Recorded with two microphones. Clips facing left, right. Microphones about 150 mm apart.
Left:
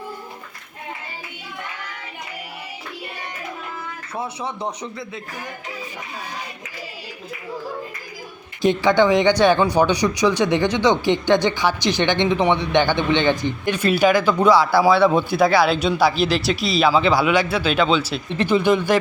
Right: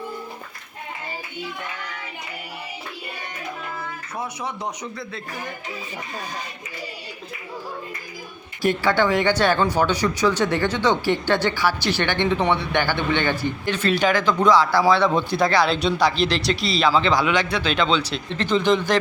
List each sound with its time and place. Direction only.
4.2 s speech: 25° left (ahead or behind)
8.6 s speech: 15° left (ahead or behind)